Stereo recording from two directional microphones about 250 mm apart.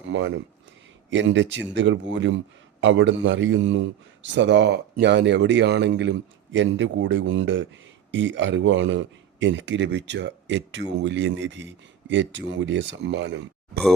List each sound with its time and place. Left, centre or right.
0.1 s a man's voice: right